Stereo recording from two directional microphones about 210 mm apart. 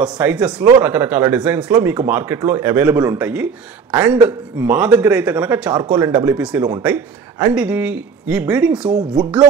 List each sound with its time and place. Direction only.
0.0 s speech: 5° right (ahead or behind)
4.6 s a man's voice: 5° right (ahead or behind)